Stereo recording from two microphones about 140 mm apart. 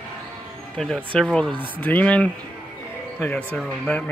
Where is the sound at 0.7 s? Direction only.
5° left (ahead or behind).